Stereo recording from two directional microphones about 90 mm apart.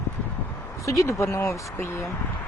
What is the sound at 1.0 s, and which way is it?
Speech, 35° left (ahead or behind).